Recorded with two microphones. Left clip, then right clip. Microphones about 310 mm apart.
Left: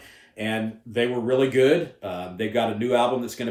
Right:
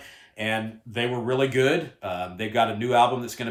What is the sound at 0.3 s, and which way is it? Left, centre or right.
Speech, centre.